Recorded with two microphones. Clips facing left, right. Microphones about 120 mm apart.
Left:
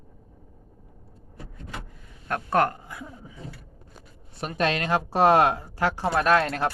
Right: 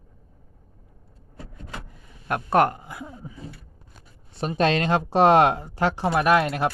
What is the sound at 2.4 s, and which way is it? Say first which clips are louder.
Speech: right 3 dB; 20° right (ahead or behind).